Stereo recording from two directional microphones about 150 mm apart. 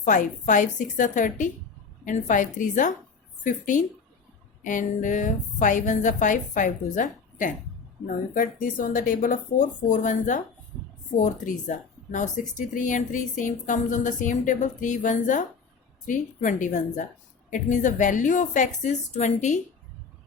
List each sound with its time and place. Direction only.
0.0 s speech: 60° left (ahead or behind)